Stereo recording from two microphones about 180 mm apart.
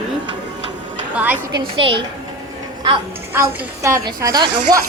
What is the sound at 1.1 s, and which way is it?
Speech, 10° right (ahead or behind).